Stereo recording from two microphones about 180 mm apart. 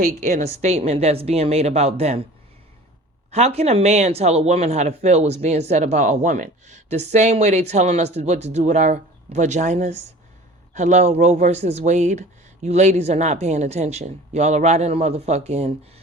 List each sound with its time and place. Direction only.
0.0 s a woman's voice: 50° right (ahead or behind)
0.4 s speech: 35° right (ahead or behind)
3.3 s speech: 35° right (ahead or behind)